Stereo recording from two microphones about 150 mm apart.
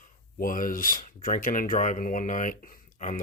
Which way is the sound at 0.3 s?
65° left (ahead or behind).